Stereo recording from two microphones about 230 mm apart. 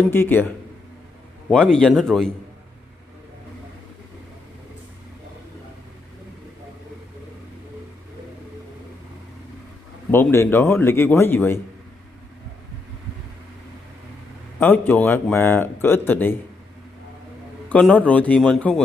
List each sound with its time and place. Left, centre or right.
0.1 s speech: centre
1.5 s a man's voice: centre
10.1 s speech: centre
14.6 s speech: centre
17.6 s a man's voice: centre